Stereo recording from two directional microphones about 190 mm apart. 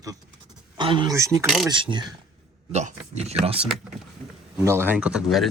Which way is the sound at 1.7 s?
25° right (ahead or behind).